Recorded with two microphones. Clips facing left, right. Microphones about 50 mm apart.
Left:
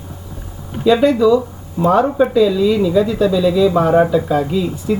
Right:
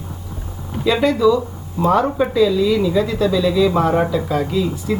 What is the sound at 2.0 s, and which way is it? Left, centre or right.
Speech, centre.